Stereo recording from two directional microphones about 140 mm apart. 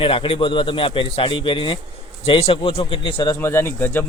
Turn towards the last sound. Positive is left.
turn(degrees=15)  # may be behind; listen again after turning